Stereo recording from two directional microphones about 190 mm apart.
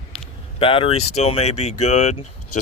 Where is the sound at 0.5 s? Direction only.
30° left (ahead or behind).